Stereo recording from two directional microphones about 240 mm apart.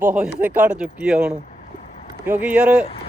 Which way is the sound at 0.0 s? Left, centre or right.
Centre.